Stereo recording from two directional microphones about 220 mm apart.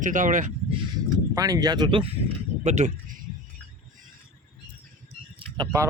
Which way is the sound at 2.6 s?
30° right (ahead or behind).